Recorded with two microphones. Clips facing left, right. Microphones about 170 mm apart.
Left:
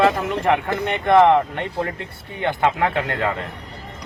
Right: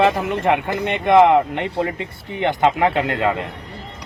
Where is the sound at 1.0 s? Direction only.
15° right (ahead or behind).